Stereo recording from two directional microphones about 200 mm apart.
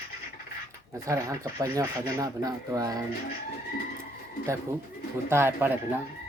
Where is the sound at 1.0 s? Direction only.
15° right (ahead or behind).